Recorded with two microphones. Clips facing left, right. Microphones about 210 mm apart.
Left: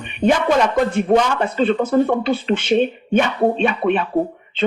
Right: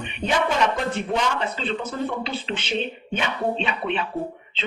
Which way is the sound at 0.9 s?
50° left (ahead or behind).